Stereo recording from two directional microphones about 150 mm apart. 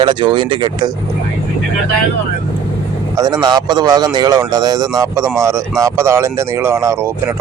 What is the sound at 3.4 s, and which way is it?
Speech, 30° right (ahead or behind).